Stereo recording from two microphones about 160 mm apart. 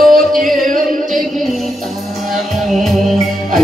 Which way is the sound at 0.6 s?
55° right (ahead or behind).